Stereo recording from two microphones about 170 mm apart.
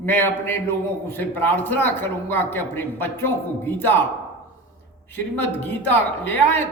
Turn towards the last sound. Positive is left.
turn(degrees=10)  # may be behind; listen again after turning